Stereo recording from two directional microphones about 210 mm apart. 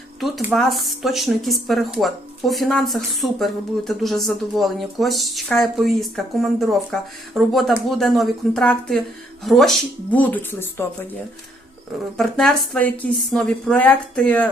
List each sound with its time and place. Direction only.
0.2 s speech: centre (ahead or behind)
12.1 s speech: centre (ahead or behind)